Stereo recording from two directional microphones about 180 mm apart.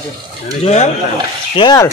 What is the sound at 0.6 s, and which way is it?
Speech, 40° left (ahead or behind).